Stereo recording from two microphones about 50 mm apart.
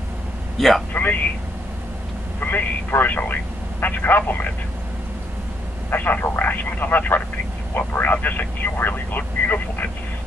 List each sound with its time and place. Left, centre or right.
0.6 s a man's voice: centre
0.9 s speech: left
2.4 s speech: left
5.9 s speech: left